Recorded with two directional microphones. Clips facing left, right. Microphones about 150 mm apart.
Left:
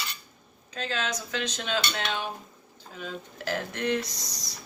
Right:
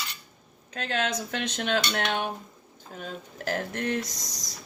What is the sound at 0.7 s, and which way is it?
Speech, 55° right (ahead or behind).